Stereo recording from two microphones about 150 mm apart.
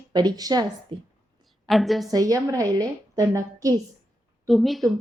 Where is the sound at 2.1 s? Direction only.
25° right (ahead or behind).